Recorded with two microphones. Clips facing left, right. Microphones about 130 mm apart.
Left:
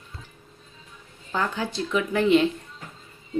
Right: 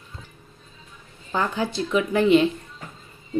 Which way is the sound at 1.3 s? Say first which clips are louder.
Right 2 dB; 15° right (ahead or behind).